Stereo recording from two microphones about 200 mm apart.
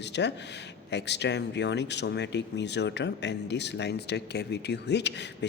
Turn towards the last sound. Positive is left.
turn(degrees=60)  # may be behind; listen again after turning